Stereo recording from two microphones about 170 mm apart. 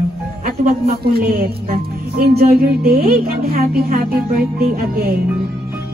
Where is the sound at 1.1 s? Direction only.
60° right (ahead or behind).